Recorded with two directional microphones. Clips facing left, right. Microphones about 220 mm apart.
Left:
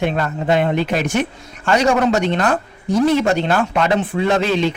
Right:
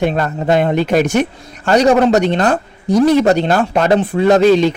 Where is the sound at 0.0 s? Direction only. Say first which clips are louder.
Right 3 dB; 40° right (ahead or behind).